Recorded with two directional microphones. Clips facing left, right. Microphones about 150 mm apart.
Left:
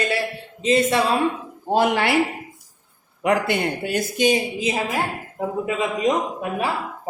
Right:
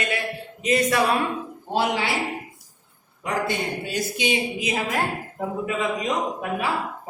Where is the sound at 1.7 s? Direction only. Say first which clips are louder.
Left 5 dB; 55° left (ahead or behind).